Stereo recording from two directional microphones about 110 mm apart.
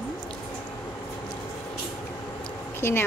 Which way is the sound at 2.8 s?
20° left (ahead or behind).